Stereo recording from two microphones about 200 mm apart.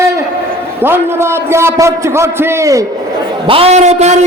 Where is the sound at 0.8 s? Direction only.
10° right (ahead or behind).